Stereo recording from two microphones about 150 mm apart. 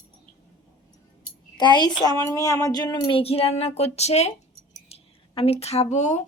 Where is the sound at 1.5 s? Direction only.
30° left (ahead or behind).